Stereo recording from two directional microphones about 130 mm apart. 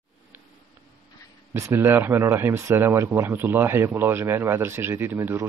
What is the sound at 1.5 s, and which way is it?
Speech, 20° right (ahead or behind).